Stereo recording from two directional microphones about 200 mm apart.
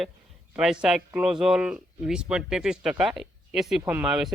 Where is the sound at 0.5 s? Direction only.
5° right (ahead or behind).